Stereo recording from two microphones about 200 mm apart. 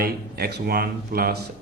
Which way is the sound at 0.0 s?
50° right (ahead or behind).